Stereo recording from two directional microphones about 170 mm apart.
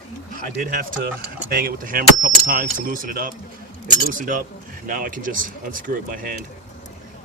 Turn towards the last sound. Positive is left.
turn(degrees=-55)  # may be behind; listen again after turning